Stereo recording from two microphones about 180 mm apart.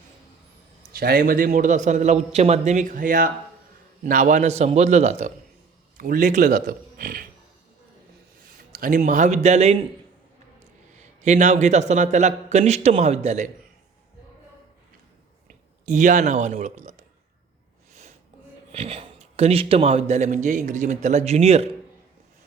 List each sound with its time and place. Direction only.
0.9 s a man's voice: 55° right (ahead or behind); by 5.3 s 40° right (ahead or behind)
6.0 s a man's voice: 50° right (ahead or behind)
8.5 s speech: 50° right (ahead or behind)
11.2 s speech: 40° right (ahead or behind)
15.9 s speech: 45° right (ahead or behind)
18.7 s speech: 35° right (ahead or behind)